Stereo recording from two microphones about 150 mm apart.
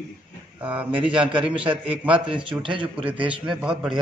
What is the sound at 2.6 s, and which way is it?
Speech, 35° right (ahead or behind).